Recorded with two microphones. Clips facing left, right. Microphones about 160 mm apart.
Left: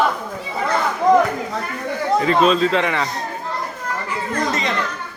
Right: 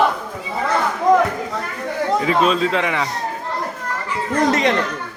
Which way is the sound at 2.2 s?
5° right (ahead or behind).